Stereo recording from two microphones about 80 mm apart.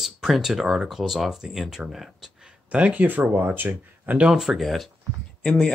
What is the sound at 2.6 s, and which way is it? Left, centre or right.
Speech, centre.